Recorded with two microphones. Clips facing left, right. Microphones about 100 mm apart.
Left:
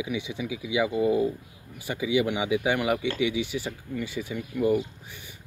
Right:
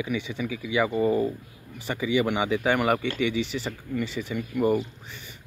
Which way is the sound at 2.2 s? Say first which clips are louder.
Right 2 dB; 65° right (ahead or behind).